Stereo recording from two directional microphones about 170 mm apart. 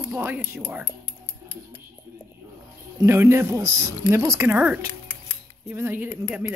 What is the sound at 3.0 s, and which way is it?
Speech, 15° right (ahead or behind).